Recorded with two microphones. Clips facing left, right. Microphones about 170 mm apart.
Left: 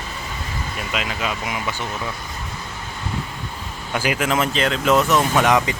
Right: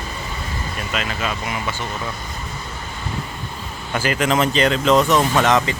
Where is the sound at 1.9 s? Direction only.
Centre (ahead or behind).